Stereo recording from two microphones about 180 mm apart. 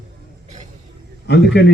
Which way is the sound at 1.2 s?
70° left (ahead or behind).